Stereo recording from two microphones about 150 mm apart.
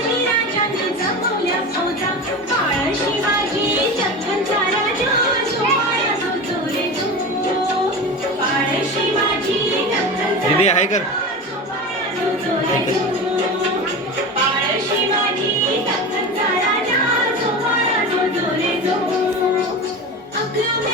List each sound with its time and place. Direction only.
10.6 s music: 50° left (ahead or behind)